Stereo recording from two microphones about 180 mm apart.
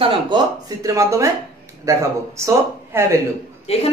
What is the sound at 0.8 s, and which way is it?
Speech, 15° right (ahead or behind).